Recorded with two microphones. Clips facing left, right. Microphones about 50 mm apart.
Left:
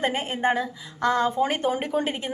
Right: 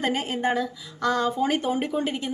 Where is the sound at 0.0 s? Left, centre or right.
Left.